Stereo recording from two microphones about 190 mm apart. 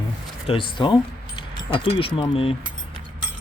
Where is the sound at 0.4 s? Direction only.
25° left (ahead or behind).